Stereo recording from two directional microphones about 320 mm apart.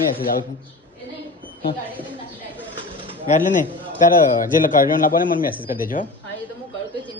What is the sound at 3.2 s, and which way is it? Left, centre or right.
Speech, left.